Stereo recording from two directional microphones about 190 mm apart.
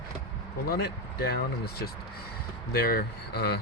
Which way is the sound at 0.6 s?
55° left (ahead or behind).